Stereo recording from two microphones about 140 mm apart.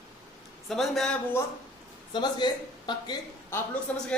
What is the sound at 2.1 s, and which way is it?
Speech, 30° left (ahead or behind).